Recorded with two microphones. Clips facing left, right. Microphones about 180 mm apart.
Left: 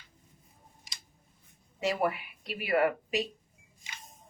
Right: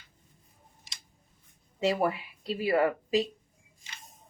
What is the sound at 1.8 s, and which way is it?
Speech, 25° right (ahead or behind).